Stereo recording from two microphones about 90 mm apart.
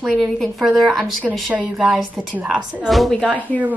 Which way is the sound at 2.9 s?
Centre (ahead or behind).